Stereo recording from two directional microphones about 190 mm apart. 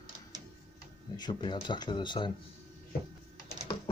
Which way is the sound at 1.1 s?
20° left (ahead or behind).